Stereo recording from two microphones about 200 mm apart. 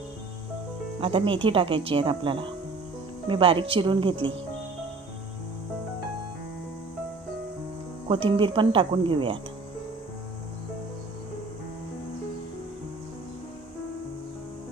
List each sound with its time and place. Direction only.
1.0 s speech: 25° right (ahead or behind)
8.0 s speech: 25° right (ahead or behind)